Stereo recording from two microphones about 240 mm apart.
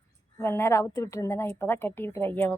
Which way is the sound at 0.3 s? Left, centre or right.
Centre.